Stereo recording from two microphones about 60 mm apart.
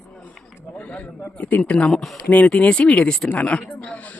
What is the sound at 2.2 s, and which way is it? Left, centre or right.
Speech, left.